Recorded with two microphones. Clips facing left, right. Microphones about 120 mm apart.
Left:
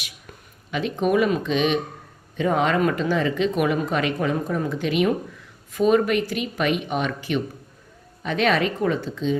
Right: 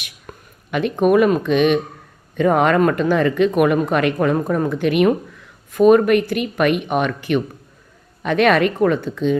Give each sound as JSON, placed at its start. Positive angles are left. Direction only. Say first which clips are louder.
{"t": 0.7, "sound": "speech", "louder": "right 6 dB", "side_deg": -55}